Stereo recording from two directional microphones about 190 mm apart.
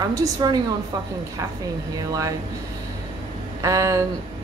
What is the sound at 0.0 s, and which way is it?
Speech, 20° right (ahead or behind).